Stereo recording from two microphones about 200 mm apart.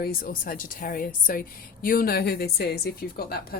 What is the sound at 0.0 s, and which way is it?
A woman's voice, 45° left (ahead or behind).